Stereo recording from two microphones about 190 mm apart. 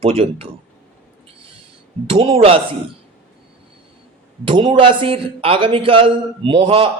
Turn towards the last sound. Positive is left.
turn(degrees=-30)  # may be behind; listen again after turning